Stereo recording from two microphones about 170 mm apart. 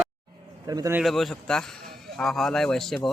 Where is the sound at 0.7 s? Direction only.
20° right (ahead or behind).